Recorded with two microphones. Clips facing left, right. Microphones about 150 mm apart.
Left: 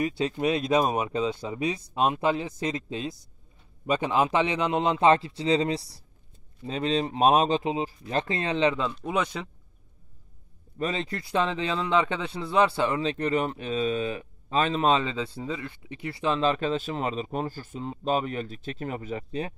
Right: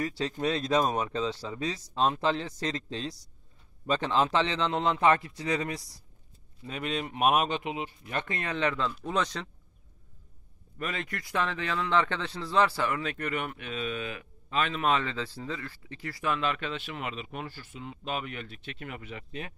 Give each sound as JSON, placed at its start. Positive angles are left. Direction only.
{"t": 0.2, "sound": "a man's voice", "side_deg": 15}
{"t": 10.8, "sound": "a man's voice", "side_deg": 30}